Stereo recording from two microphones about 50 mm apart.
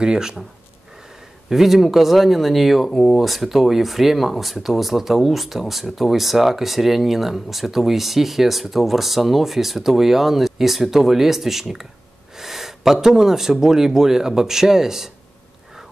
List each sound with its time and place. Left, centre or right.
0.0 s speech: centre
1.5 s speech: centre